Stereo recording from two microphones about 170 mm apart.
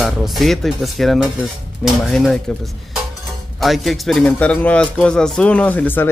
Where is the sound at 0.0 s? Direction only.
Centre (ahead or behind).